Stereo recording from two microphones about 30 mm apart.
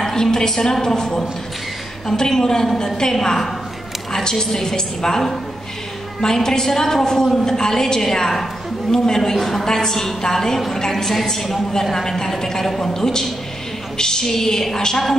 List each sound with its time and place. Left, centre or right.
0.0 s a woman's voice: centre
6.2 s a woman's voice: centre